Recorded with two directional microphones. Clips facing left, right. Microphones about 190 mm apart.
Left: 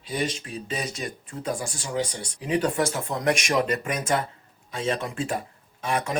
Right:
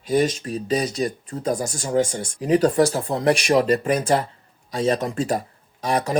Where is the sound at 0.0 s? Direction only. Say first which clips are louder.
Right 9 dB; 45° right (ahead or behind).